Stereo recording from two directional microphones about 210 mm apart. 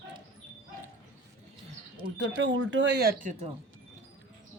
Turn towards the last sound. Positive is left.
turn(degrees=-40)  # may be behind; listen again after turning